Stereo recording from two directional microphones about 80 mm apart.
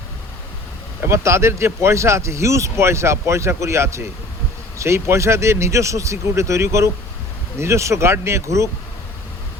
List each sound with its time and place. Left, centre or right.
1.0 s speech: right